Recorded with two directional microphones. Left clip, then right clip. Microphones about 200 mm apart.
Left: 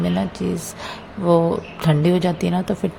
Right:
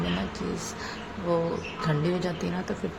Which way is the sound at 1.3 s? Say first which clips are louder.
Left 10 dB; 35° left (ahead or behind).